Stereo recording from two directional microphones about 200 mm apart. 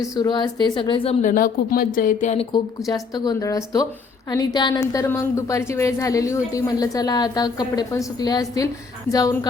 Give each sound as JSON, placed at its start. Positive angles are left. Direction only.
{"t": 0.0, "sound": "a woman's voice", "side_deg": 20}
{"t": 1.2, "sound": "speech", "side_deg": 45}
{"t": 2.5, "sound": "a woman's voice", "side_deg": 20}